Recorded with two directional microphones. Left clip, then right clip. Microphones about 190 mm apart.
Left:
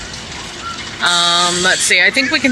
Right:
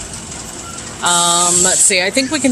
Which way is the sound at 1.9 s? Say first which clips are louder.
Left 3 dB; 10° right (ahead or behind).